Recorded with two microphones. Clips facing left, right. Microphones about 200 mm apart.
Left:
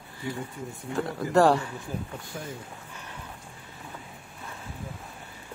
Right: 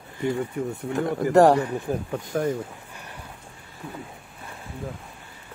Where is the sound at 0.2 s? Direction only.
70° right (ahead or behind).